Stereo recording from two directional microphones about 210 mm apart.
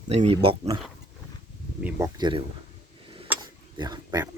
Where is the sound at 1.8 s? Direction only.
10° right (ahead or behind).